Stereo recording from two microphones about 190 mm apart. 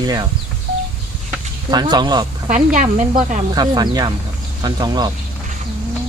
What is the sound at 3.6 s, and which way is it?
Speech, 20° right (ahead or behind).